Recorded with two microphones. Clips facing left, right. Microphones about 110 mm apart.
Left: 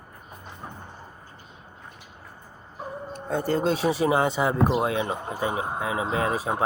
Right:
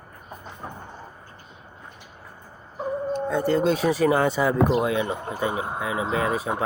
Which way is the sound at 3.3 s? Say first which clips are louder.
Right 1 dB; 40° left (ahead or behind).